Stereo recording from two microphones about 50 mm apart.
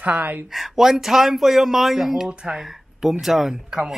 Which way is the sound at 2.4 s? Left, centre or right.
Centre.